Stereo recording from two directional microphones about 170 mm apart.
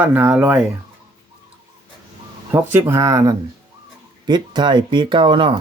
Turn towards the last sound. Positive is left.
turn(degrees=-30)  # may be behind; listen again after turning